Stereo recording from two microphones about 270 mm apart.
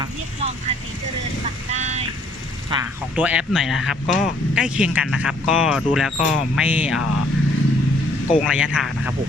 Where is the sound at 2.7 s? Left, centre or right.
Centre.